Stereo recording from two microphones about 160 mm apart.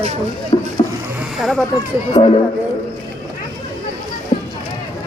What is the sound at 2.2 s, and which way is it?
Speech, 30° left (ahead or behind).